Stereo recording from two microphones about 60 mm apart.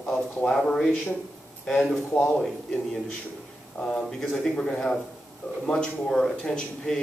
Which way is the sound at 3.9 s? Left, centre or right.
Centre.